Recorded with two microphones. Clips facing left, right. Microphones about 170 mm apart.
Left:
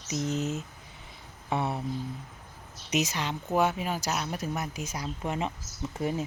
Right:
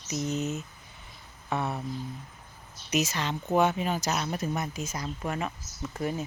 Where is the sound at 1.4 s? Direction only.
25° left (ahead or behind).